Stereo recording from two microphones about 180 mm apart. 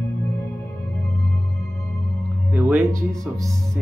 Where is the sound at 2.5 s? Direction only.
15° right (ahead or behind).